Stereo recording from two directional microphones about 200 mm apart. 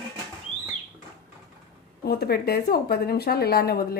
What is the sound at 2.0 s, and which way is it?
Speech, 50° left (ahead or behind).